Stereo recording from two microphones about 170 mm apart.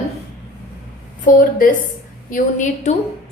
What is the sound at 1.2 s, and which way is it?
A woman's voice, 55° left (ahead or behind).